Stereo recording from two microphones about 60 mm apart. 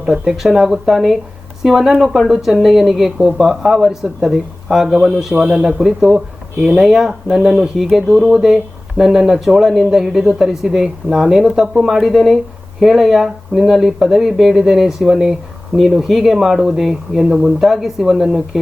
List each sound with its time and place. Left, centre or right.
0.0 s speech: centre